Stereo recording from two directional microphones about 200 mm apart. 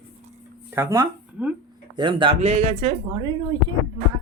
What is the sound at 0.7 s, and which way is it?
Speech, 10° right (ahead or behind).